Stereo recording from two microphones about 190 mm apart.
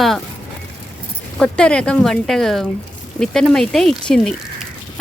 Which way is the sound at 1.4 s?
5° left (ahead or behind).